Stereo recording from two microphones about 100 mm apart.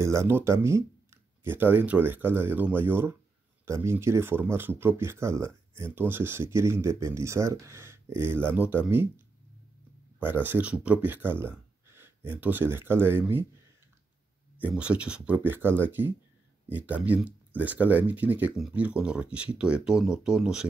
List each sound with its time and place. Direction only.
0.0 s speech: 30° right (ahead or behind)
10.2 s speech: 20° right (ahead or behind)
14.6 s speech: 10° right (ahead or behind)